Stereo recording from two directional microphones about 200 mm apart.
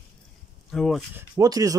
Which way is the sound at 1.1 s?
15° right (ahead or behind).